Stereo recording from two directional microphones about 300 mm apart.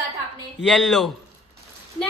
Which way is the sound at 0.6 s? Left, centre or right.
Centre.